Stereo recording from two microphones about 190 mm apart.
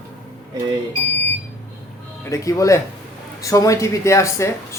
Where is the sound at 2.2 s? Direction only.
15° left (ahead or behind).